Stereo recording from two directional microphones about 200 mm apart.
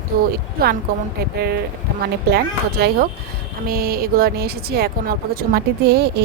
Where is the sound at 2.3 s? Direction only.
50° right (ahead or behind).